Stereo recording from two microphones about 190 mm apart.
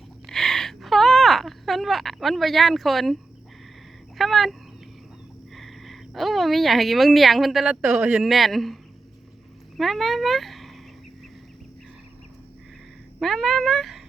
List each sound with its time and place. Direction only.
0.3 s a sound: centre (ahead or behind)
4.2 s speech: centre (ahead or behind)
5.5 s speech: centre (ahead or behind)
13.1 s speech: centre (ahead or behind)